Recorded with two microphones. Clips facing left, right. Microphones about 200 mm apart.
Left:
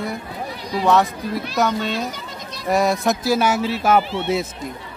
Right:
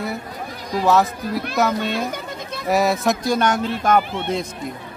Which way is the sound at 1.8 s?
55° right (ahead or behind).